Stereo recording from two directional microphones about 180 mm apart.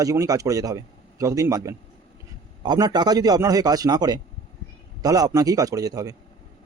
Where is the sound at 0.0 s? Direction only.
20° right (ahead or behind).